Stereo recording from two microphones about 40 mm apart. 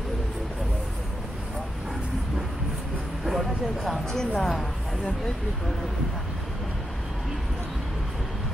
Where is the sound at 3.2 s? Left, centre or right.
Centre.